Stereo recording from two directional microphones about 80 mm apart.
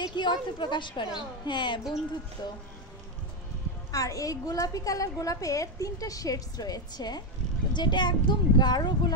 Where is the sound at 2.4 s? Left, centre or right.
Left.